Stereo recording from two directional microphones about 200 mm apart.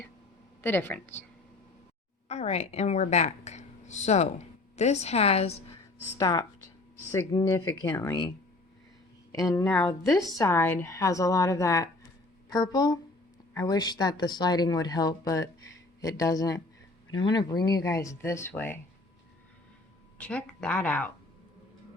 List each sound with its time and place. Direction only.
0.6 s speech: 10° left (ahead or behind)
2.2 s a woman's voice: 35° left (ahead or behind)
6.1 s speech: 20° left (ahead or behind)
9.3 s speech: 15° left (ahead or behind)
20.1 s speech: 5° left (ahead or behind)